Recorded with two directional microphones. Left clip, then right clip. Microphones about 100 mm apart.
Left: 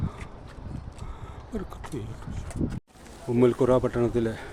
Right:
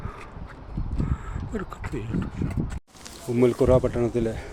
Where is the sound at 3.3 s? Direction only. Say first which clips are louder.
Right 2 dB; 10° left (ahead or behind).